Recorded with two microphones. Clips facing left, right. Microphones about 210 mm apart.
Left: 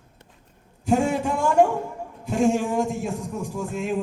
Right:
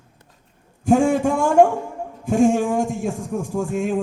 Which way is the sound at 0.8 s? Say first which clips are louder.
Right 5 dB; 50° right (ahead or behind).